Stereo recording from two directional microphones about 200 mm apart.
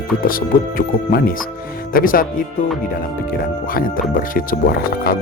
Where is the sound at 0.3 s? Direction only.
45° left (ahead or behind).